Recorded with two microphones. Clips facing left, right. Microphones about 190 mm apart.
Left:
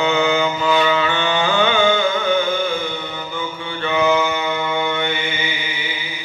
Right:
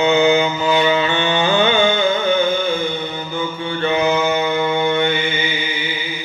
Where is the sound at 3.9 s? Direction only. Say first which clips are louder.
Left 1 dB; 25° right (ahead or behind).